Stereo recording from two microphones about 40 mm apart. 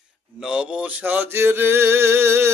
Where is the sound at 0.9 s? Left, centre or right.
Right.